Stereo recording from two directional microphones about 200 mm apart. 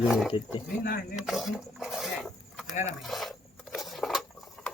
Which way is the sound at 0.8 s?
45° left (ahead or behind).